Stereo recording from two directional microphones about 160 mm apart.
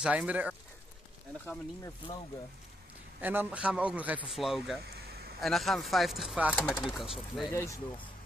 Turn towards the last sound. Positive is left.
turn(degrees=20)  # may be behind; listen again after turning